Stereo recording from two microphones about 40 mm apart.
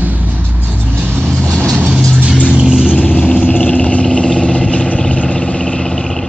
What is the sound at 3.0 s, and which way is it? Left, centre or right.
Vehicle, left.